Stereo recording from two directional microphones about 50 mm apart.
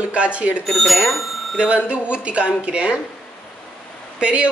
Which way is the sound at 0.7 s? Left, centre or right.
Centre.